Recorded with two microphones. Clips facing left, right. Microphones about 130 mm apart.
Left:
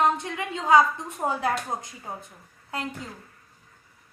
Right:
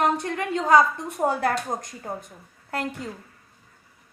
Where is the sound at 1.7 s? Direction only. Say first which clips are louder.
Right 2 dB; 5° left (ahead or behind).